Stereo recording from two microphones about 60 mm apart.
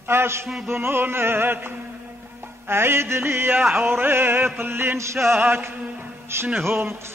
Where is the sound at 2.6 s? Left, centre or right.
Right.